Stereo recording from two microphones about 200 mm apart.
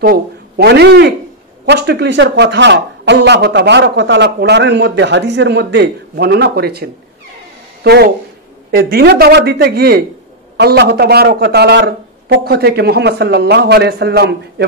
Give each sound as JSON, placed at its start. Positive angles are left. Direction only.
{"t": 0.0, "sound": "a man's voice", "side_deg": -50}